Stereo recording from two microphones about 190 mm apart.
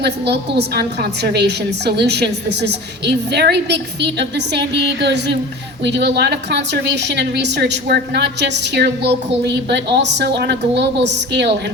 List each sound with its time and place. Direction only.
0.0 s a woman's voice: 60° right (ahead or behind)